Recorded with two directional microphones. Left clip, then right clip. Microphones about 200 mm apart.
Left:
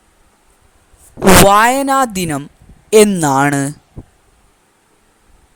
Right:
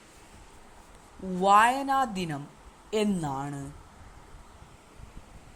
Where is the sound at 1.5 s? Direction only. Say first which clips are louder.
Left 11 dB; 50° left (ahead or behind).